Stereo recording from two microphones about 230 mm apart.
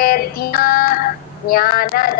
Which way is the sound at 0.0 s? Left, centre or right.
Left.